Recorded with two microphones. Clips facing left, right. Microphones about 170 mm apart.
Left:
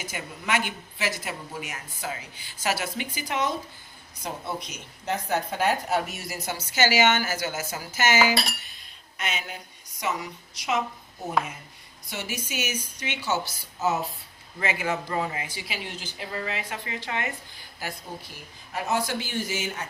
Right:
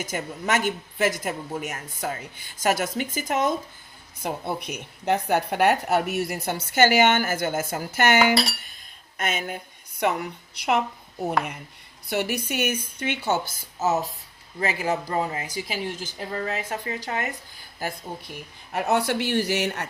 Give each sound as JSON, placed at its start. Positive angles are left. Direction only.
{"t": 0.0, "sound": "a woman's voice", "side_deg": -45}
{"t": 4.2, "sound": "a woman's voice", "side_deg": -55}
{"t": 9.1, "sound": "a woman's voice", "side_deg": -50}
{"t": 12.0, "sound": "a woman's voice", "side_deg": -65}
{"t": 18.7, "sound": "speech", "side_deg": -65}